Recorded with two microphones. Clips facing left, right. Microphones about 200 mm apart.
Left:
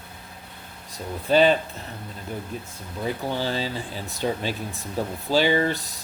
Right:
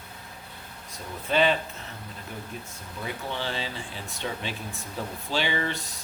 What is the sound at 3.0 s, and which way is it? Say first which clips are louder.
Speech: left 6 dB; 40° left (ahead or behind).